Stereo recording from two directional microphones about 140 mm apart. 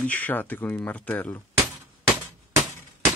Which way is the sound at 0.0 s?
10° left (ahead or behind).